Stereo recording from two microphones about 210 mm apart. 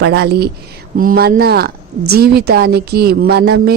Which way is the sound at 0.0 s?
50° right (ahead or behind).